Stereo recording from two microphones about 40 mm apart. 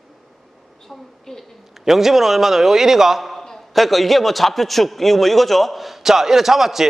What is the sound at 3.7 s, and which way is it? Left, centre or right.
A man's voice, centre.